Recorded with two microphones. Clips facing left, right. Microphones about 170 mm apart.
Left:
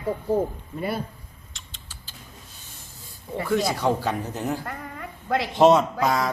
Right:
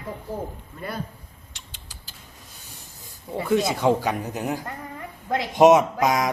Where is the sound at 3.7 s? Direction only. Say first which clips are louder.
Right 2 dB; 20° right (ahead or behind).